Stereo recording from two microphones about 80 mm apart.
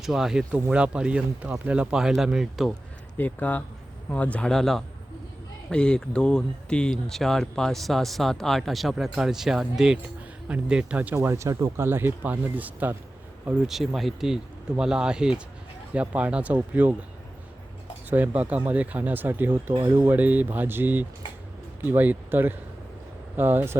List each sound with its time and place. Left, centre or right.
0.0 s speech: centre
3.2 s speech: left
4.4 s speech: centre
11.1 s speech: right
11.9 s speech: right
13.7 s speech: centre
18.1 s speech: centre